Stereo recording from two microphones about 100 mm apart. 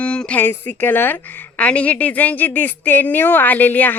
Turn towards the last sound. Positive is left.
turn(degrees=15)  # may be behind; listen again after turning